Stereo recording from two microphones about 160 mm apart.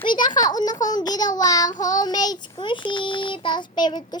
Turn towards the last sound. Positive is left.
turn(degrees=30)  # may be behind; listen again after turning